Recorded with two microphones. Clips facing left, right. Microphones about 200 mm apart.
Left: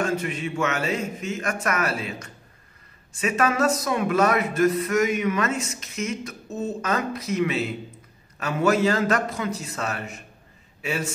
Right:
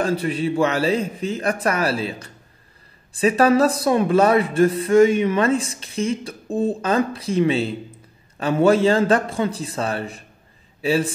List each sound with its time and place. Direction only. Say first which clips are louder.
0.0 s a man's voice: right 5 dB; 35° right (ahead or behind)